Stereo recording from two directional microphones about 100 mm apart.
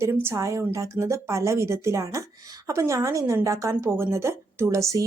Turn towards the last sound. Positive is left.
turn(degrees=-30)  # may be behind; listen again after turning